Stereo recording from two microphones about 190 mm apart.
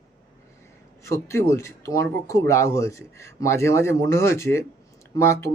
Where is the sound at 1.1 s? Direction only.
15° left (ahead or behind).